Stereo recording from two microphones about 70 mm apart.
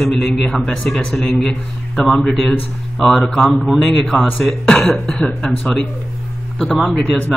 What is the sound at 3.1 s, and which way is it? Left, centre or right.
Speech, centre.